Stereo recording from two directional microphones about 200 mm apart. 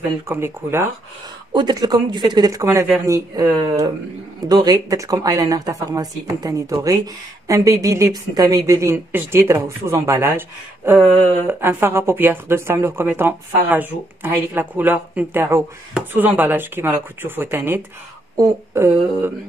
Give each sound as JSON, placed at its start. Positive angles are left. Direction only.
{"t": 0.3, "sound": "speech", "side_deg": -10}